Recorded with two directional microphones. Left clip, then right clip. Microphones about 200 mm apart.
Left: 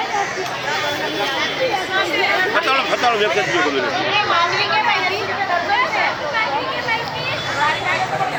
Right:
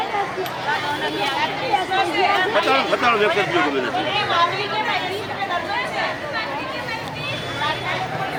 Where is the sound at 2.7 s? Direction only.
40° right (ahead or behind).